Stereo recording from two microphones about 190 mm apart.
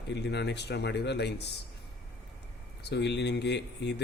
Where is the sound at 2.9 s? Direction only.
65° left (ahead or behind).